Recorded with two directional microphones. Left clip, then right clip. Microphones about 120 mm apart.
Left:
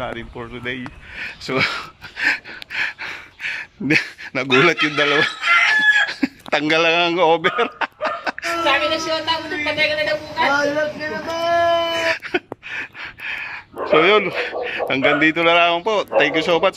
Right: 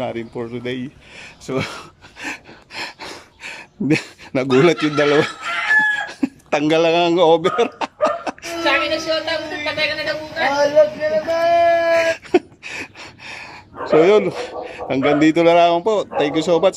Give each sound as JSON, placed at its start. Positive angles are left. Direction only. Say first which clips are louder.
{"t": 0.0, "sound": "speech", "louder": "right 3 dB", "side_deg": -35}
{"t": 1.5, "sound": "speech", "louder": "left 4 dB", "side_deg": -25}
{"t": 2.7, "sound": "gasp", "louder": "left 6 dB", "side_deg": -40}
{"t": 3.8, "sound": "speech", "louder": "left 1 dB", "side_deg": -30}
{"t": 5.2, "sound": "chicken", "louder": "left 7 dB", "side_deg": -25}
{"t": 6.8, "sound": "speech", "louder": "right 2 dB", "side_deg": -35}
{"t": 8.5, "sound": "a woman's voice", "louder": "right 1 dB", "side_deg": 0}
{"t": 12.1, "sound": "a sound", "louder": "right 3 dB", "side_deg": -30}
{"t": 16.2, "sound": "speech", "louder": "left 2 dB", "side_deg": -35}